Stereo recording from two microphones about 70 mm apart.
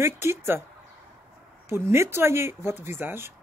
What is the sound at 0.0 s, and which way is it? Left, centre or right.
Speech, right.